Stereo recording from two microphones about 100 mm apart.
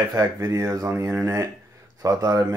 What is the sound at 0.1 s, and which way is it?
Speech, 35° right (ahead or behind).